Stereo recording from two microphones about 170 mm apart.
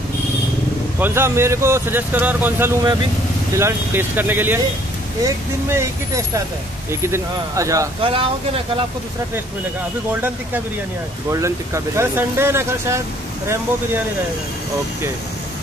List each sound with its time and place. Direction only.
0.9 s speech: 10° right (ahead or behind)
8.0 s speech: 30° right (ahead or behind)
11.3 s speech: 15° right (ahead or behind)